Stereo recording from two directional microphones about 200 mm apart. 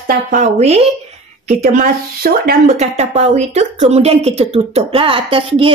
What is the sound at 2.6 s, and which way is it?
A woman's voice, 35° right (ahead or behind).